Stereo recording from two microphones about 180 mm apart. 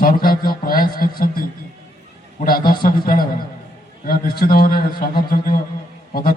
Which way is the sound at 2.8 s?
55° left (ahead or behind).